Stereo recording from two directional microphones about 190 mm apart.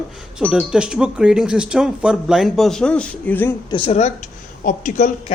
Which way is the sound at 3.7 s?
30° left (ahead or behind).